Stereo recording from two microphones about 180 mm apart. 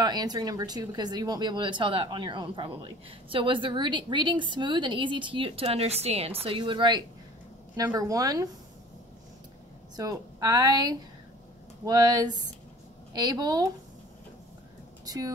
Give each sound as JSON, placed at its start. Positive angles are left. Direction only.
{"t": 0.0, "sound": "a woman's voice", "side_deg": -25}
{"t": 9.9, "sound": "a woman's voice", "side_deg": -20}
{"t": 15.0, "sound": "a woman's voice", "side_deg": -20}